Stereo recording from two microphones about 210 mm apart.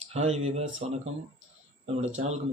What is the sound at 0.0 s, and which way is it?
Speech, 30° right (ahead or behind).